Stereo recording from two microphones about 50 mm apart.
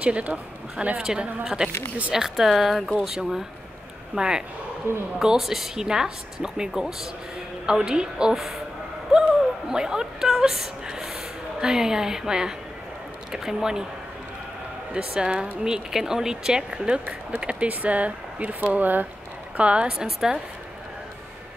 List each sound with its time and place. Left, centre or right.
0.0 s speech: right
4.9 s speech: right
5.2 s a woman's voice: centre
15.0 s speech: centre; by 19.0 s right
19.5 s speech: right